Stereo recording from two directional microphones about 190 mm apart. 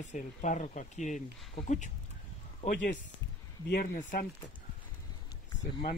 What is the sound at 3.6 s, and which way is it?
Speech, 50° left (ahead or behind).